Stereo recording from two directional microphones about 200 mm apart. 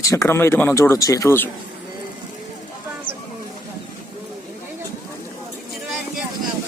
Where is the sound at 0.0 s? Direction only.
15° left (ahead or behind).